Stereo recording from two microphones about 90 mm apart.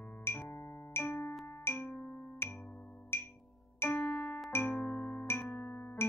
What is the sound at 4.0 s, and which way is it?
Music, 10° left (ahead or behind).